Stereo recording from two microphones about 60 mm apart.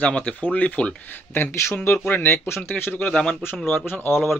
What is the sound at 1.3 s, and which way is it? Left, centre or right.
Speech, left.